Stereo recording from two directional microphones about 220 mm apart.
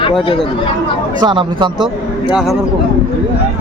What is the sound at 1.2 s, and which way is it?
Speech, 20° right (ahead or behind).